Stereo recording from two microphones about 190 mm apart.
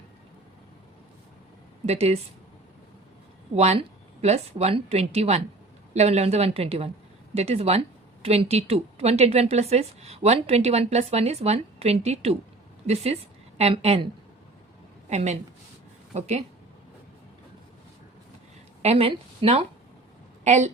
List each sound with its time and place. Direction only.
1.9 s a woman's voice: 35° right (ahead or behind)
3.5 s a woman's voice: 35° right (ahead or behind)
15.1 s a woman's voice: 35° right (ahead or behind)
18.8 s a woman's voice: 30° right (ahead or behind)